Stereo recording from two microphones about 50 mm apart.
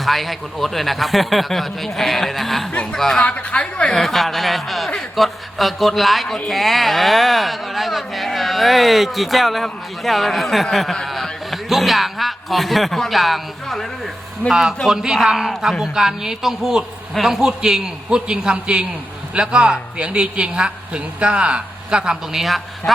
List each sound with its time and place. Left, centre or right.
0.0 s speech: centre
3.2 s a woman's voice: left
3.9 s speech: centre
14.5 s a man's voice: centre